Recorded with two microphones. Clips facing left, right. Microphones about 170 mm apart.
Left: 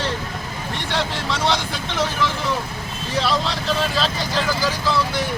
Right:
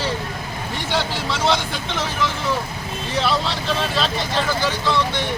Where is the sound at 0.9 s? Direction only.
Centre (ahead or behind).